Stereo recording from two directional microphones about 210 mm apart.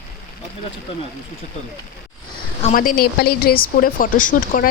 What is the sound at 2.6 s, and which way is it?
A woman's voice, 40° left (ahead or behind).